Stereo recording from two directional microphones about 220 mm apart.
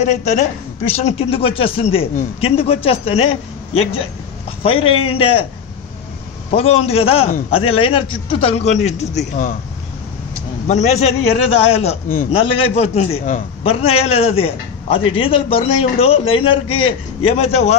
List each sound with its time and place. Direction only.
0.0 s a woman's voice: 30° left (ahead or behind)
4.6 s a man's voice: 25° left (ahead or behind)
6.5 s a man's voice: 25° left (ahead or behind)
10.7 s a man's voice: 30° left (ahead or behind)